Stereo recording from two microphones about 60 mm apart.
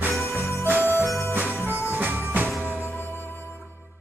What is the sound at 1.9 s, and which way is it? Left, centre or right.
Music, right.